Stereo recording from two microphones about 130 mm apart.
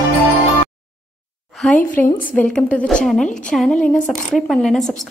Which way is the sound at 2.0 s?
15° left (ahead or behind).